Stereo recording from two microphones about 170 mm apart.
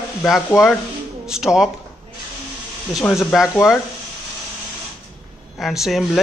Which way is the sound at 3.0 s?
Centre (ahead or behind).